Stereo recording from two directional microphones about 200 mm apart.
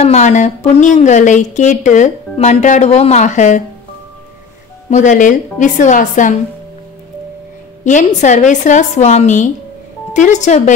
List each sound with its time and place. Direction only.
0.0 s speech: 35° left (ahead or behind)
4.8 s speech: 35° left (ahead or behind)
7.8 s speech: 35° left (ahead or behind)